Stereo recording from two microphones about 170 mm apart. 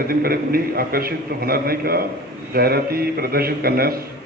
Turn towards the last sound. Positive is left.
turn(degrees=-65)  # may be behind; listen again after turning